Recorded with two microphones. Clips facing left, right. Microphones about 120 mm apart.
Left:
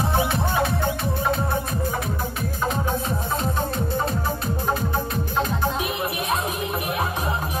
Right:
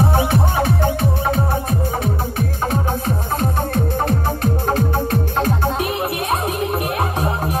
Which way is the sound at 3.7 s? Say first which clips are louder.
Right 5 dB; 60° right (ahead or behind).